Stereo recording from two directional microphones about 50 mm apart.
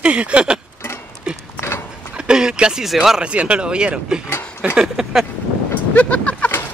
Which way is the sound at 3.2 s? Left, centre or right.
Right.